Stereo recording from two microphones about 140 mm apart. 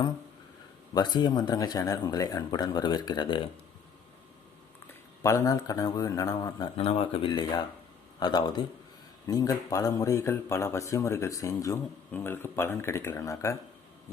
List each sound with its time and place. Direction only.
0.9 s a man's voice: 30° left (ahead or behind)
4.9 s speech: 20° left (ahead or behind)
6.7 s a man's voice: 45° left (ahead or behind); by 13.6 s 20° left (ahead or behind)